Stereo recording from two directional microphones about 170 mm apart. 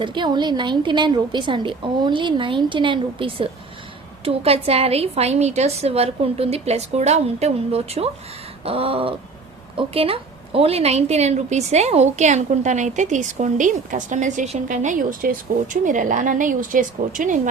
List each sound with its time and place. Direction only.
0.0 s a woman's voice: 25° right (ahead or behind); by 17.5 s 50° right (ahead or behind)